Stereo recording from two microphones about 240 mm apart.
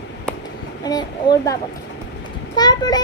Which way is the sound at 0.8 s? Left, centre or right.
Centre.